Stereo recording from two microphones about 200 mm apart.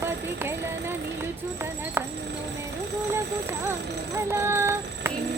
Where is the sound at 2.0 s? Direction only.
10° right (ahead or behind).